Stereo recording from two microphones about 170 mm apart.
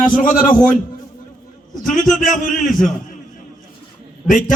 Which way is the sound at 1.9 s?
50° left (ahead or behind).